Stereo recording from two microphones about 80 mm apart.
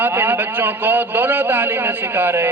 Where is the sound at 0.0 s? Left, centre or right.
Right.